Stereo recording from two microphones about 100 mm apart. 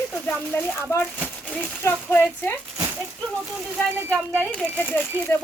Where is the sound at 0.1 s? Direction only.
15° left (ahead or behind).